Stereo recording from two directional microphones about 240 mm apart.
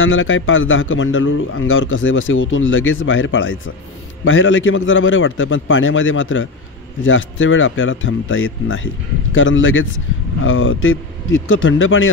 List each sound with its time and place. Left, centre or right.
0.0 s a man's voice: left